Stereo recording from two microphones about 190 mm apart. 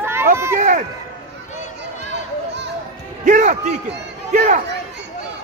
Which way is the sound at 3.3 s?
40° right (ahead or behind).